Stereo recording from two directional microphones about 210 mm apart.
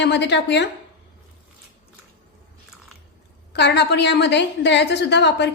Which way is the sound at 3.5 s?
55° left (ahead or behind).